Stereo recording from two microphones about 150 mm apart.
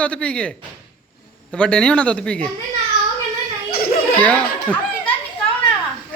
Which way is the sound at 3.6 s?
90° left.